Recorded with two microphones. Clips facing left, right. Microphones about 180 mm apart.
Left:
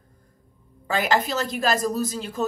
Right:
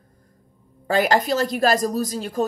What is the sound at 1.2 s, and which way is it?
Speech, 40° right (ahead or behind).